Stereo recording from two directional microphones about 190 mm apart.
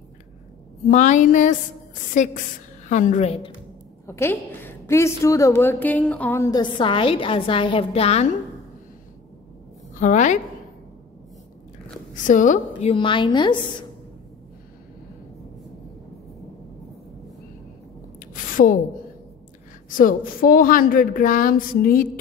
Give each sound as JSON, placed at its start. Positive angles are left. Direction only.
{"t": 0.8, "sound": "a woman's voice", "side_deg": 40}
{"t": 2.9, "sound": "a woman's voice", "side_deg": 40}
{"t": 4.0, "sound": "a woman's voice", "side_deg": 15}
{"t": 9.9, "sound": "a woman's voice", "side_deg": 40}
{"t": 12.1, "sound": "a woman's voice", "side_deg": 40}
{"t": 12.9, "sound": "a woman's voice", "side_deg": 25}
{"t": 18.3, "sound": "a sound", "side_deg": 45}
{"t": 20.0, "sound": "a woman's voice", "side_deg": 45}